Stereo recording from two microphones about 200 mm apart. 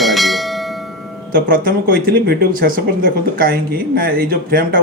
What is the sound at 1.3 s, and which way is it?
Speech, 45° right (ahead or behind).